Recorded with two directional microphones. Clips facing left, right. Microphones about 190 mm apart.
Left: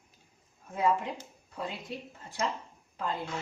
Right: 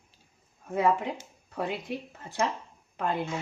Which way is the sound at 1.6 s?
70° right (ahead or behind).